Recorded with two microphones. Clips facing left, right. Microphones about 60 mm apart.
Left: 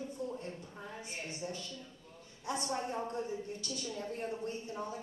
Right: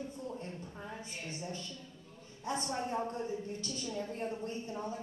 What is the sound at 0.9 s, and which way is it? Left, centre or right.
Speech, left.